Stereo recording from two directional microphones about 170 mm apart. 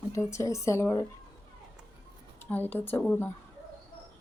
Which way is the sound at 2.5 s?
10° left (ahead or behind).